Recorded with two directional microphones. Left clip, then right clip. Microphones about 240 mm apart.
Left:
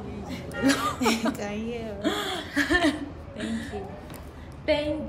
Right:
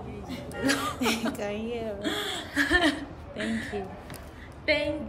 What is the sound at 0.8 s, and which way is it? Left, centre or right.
Chuckle, centre.